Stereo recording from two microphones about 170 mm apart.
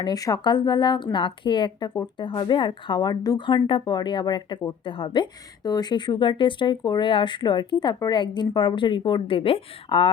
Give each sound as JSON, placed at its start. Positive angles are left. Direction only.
{"t": 0.0, "sound": "a woman's voice", "side_deg": 20}